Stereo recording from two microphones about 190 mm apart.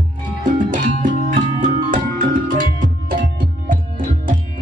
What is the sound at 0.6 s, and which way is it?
Music, 45° right (ahead or behind).